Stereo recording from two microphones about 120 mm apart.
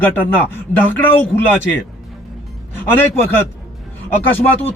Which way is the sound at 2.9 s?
20° left (ahead or behind).